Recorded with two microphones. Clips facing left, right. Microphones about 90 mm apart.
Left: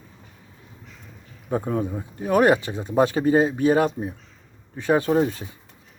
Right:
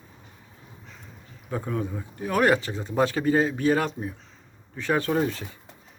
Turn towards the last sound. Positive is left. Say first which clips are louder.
# left 5 dB
turn(degrees=20)  # may be behind; listen again after turning